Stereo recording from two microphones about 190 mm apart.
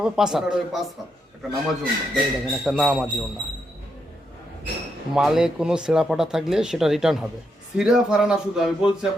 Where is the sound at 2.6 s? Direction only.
Centre (ahead or behind).